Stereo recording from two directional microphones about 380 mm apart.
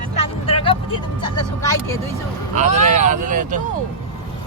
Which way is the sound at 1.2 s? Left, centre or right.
Centre.